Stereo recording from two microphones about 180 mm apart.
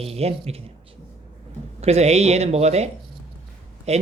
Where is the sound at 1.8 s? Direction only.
35° right (ahead or behind).